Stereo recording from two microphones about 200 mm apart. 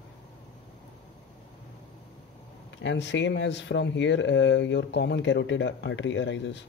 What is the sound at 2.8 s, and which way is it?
Speech, 60° left (ahead or behind).